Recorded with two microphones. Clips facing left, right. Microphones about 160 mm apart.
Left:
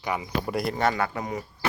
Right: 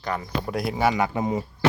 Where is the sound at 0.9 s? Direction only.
20° right (ahead or behind).